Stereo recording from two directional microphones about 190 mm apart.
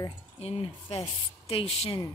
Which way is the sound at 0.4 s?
30° left (ahead or behind).